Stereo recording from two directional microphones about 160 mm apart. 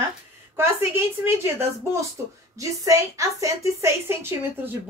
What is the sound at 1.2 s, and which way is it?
A woman's voice, 15° right (ahead or behind).